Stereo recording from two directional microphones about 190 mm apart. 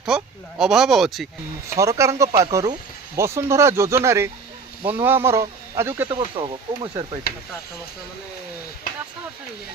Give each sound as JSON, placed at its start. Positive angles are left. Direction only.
{"t": 0.1, "sound": "speech", "side_deg": -5}
{"t": 1.7, "sound": "speech", "side_deg": -15}
{"t": 6.1, "sound": "speech", "side_deg": -25}
{"t": 7.3, "sound": "speech", "side_deg": 50}